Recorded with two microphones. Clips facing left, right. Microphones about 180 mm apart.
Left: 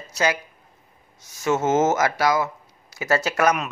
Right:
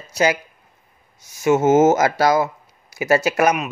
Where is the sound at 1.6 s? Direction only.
30° right (ahead or behind).